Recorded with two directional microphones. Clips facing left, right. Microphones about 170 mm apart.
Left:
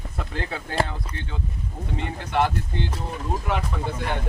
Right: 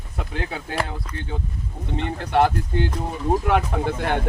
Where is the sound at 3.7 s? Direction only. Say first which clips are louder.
Right 6 dB; 60° right (ahead or behind).